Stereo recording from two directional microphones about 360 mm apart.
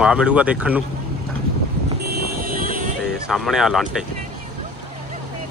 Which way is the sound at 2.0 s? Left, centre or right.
Right.